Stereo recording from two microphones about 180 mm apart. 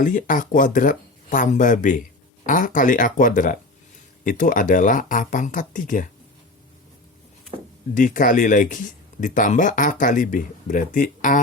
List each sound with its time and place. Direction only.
0.0 s speech: 45° left (ahead or behind)
7.9 s speech: 45° left (ahead or behind)